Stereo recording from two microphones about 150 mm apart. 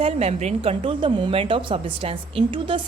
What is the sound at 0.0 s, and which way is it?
Speech, 45° right (ahead or behind).